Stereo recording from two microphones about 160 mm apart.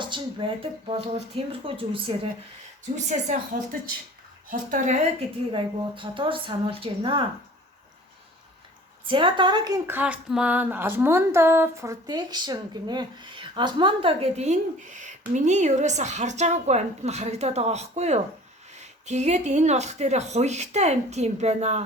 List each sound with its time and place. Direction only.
0.0 s speech: 30° right (ahead or behind)
2.9 s speech: 45° right (ahead or behind)
5.5 s speech: 30° right (ahead or behind)
9.0 s speech: 30° right (ahead or behind)